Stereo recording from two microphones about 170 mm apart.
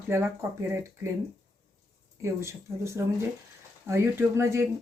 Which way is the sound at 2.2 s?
15° right (ahead or behind).